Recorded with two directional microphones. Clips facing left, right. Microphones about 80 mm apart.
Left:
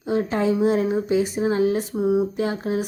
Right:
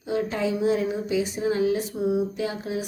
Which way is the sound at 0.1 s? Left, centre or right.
Left.